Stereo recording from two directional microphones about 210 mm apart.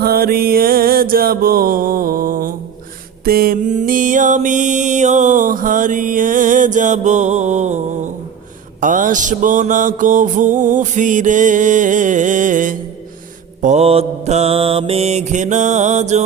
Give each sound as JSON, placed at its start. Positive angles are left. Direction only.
{"t": 0.0, "sound": "mantra", "side_deg": -45}
{"t": 8.8, "sound": "music", "side_deg": -40}